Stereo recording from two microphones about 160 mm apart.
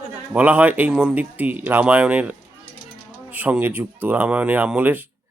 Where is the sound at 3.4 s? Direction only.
10° right (ahead or behind).